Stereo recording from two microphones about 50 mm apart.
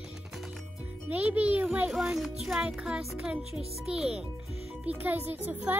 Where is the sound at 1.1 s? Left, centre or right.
Right.